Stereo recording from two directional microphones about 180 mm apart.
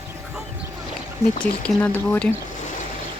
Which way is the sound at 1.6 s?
5° left (ahead or behind).